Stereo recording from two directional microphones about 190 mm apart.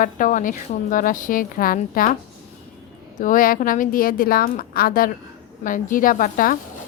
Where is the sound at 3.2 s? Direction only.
45° left (ahead or behind).